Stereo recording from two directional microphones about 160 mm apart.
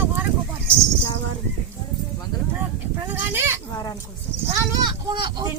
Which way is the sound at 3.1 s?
10° right (ahead or behind).